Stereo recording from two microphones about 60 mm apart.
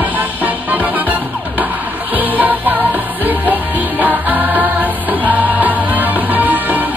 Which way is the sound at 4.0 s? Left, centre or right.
Right.